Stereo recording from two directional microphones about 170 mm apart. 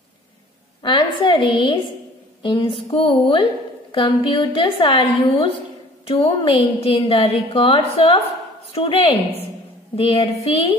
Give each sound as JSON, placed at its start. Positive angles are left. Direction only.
{"t": 0.8, "sound": "a woman's voice", "side_deg": 30}